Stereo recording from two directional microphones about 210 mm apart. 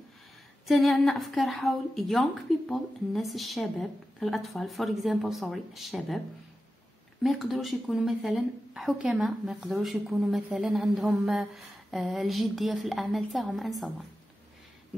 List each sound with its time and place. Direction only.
0.7 s a woman's voice: centre (ahead or behind)
7.2 s a woman's voice: centre (ahead or behind)